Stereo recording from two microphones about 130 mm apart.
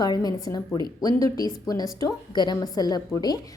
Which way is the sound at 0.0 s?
30° left (ahead or behind).